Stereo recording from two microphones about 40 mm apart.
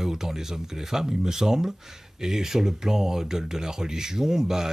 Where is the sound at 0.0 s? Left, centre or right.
Centre.